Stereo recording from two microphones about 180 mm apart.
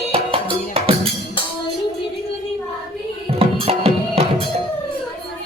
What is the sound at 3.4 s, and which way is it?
Music, 35° right (ahead or behind).